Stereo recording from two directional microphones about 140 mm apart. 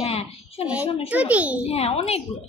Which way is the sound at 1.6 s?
45° left (ahead or behind).